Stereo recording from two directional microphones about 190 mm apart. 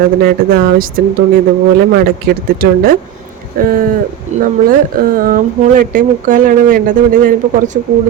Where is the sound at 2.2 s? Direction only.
50° right (ahead or behind).